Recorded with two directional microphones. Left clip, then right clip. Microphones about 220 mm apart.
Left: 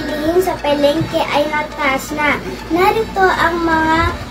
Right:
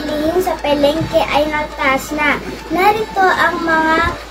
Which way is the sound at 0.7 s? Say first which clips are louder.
Right 3 dB; 10° right (ahead or behind).